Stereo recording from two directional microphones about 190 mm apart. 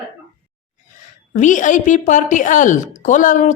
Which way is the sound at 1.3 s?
40° left (ahead or behind).